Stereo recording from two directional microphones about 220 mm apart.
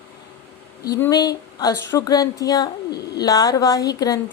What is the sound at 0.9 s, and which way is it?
Speech, 15° left (ahead or behind).